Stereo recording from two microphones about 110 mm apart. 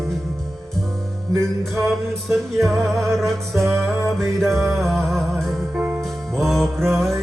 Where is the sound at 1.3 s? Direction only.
25° right (ahead or behind).